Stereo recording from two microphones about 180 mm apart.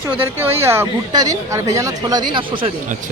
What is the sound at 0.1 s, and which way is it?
Speech, 10° right (ahead or behind).